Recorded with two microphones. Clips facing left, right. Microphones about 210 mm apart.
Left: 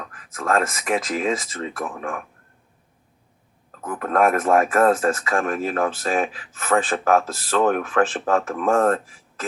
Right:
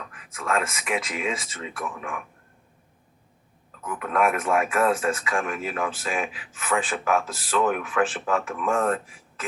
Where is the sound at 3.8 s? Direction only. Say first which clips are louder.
Left 4 dB; 40° left (ahead or behind).